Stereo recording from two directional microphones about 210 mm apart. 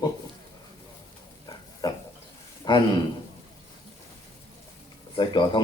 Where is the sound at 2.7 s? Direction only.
20° left (ahead or behind).